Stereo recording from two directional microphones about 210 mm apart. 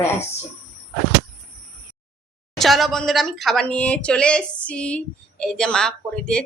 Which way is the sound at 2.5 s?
Centre (ahead or behind).